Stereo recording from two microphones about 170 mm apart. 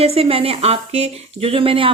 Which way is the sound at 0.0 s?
35° right (ahead or behind).